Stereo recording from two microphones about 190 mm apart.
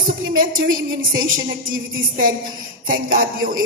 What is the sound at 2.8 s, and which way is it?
Speech, 50° right (ahead or behind).